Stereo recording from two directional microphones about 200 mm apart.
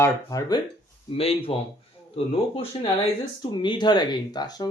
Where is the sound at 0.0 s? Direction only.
15° left (ahead or behind).